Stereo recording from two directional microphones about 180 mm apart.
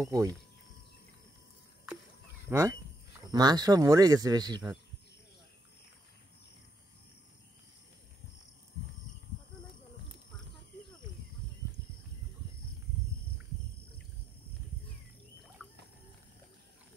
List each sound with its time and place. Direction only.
0.0 s speech: 20° right (ahead or behind)
2.5 s speech: 15° right (ahead or behind)
15.6 s a sound: 10° right (ahead or behind)